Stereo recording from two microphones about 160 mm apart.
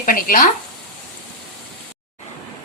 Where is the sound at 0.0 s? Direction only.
60° left (ahead or behind).